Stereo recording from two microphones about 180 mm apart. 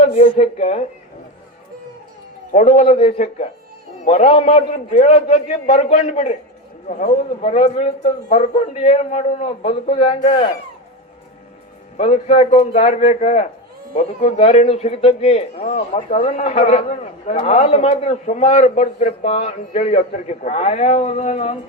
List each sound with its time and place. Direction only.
0.0 s a man's voice: 35° left (ahead or behind)
2.5 s a man's voice: 40° left (ahead or behind)
11.9 s a man's voice: 35° left (ahead or behind)